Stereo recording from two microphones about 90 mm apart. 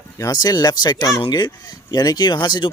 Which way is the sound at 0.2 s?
45° left (ahead or behind).